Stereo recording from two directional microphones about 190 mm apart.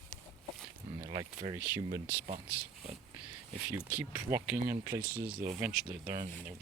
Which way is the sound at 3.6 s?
10° right (ahead or behind).